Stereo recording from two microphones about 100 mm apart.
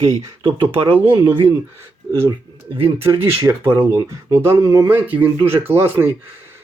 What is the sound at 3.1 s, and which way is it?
Speech, 25° right (ahead or behind).